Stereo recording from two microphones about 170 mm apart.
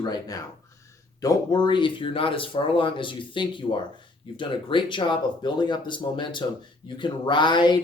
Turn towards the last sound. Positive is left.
turn(degrees=25)  # may be behind; listen again after turning